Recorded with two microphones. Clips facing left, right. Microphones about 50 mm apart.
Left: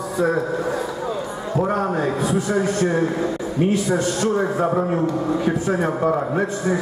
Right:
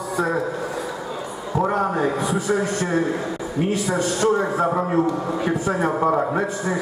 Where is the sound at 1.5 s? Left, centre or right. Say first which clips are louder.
Even; centre.